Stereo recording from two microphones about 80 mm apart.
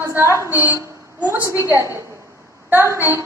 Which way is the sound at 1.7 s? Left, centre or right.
Right.